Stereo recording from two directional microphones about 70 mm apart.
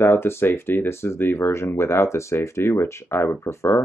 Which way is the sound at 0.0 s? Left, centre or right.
Left.